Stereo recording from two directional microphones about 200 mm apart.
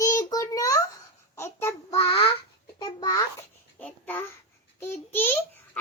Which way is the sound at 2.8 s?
20° left (ahead or behind).